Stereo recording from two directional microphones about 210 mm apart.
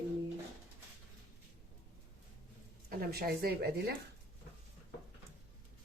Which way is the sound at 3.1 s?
50° right (ahead or behind).